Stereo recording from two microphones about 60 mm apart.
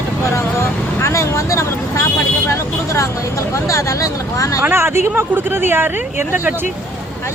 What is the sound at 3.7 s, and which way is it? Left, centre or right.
Speech, left.